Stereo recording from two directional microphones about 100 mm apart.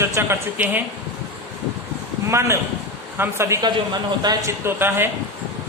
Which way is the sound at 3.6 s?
45° right (ahead or behind).